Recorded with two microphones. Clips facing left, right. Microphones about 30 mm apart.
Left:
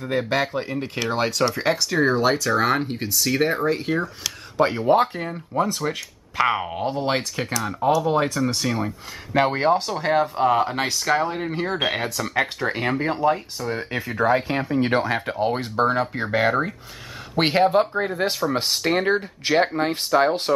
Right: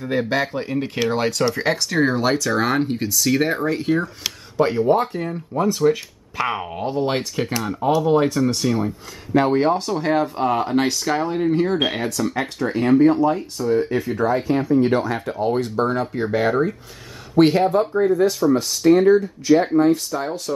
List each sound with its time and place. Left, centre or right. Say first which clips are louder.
0.0 s speech: right 1 dB; centre
5.1 s speech: right 1 dB; centre
9.7 s speech: right 1 dB; centre; by 13.7 s left
13.7 s speech: right 8 dB; left
15.3 s speech: right 5 dB; left
17.4 s speech: right 3 dB; left